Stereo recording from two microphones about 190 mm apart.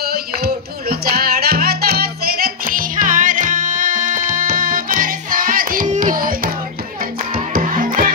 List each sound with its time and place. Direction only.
0.0 s music: 55° right (ahead or behind)